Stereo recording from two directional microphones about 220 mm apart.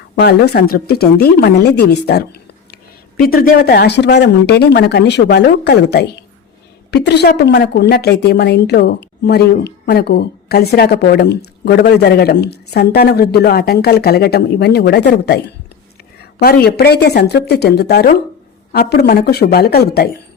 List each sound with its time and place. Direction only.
0.2 s a woman's voice: 45° left (ahead or behind)